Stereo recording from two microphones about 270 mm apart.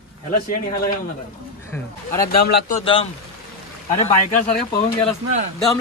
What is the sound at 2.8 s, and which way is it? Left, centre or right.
Speech, centre.